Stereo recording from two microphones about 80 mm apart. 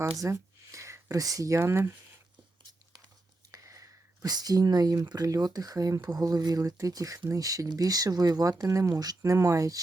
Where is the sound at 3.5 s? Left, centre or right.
Right.